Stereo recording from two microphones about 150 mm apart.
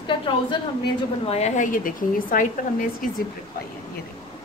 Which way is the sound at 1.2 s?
45° left (ahead or behind).